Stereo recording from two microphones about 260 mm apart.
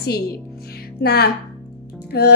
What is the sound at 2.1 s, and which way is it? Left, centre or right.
Music, left.